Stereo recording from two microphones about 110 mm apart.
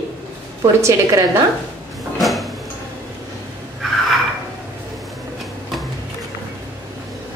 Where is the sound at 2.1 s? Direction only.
Centre (ahead or behind).